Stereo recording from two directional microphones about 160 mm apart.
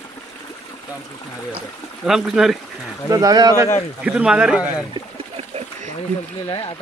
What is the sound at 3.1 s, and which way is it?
Speech, 25° right (ahead or behind).